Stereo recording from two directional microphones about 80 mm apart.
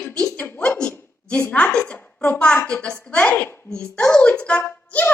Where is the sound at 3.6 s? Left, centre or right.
Centre.